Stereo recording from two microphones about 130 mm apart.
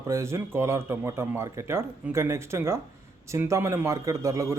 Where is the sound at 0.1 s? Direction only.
20° right (ahead or behind).